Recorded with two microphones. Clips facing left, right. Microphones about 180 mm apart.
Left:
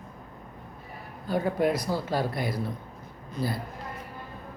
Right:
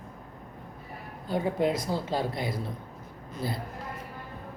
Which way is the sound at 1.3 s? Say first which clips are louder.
Left 1 dB; 20° right (ahead or behind).